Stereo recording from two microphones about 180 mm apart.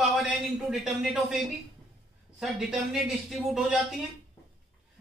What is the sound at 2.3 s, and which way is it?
A man's voice, 5° right (ahead or behind).